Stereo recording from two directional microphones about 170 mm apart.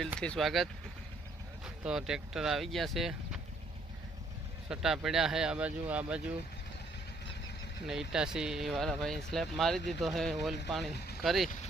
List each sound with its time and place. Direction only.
0.2 s speech: centre (ahead or behind)
4.7 s speech: 5° right (ahead or behind)
7.9 s speech: 5° right (ahead or behind)
11.4 s vehicle: 50° left (ahead or behind)